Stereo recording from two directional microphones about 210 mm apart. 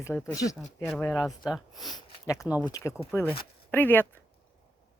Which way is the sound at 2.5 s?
5° right (ahead or behind).